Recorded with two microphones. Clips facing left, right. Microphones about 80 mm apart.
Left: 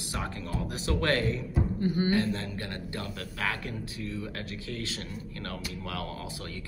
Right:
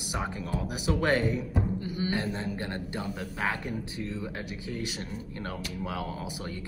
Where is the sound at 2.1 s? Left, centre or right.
Centre.